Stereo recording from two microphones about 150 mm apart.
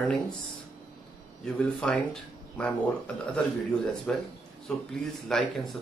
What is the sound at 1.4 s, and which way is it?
Speech, 5° left (ahead or behind).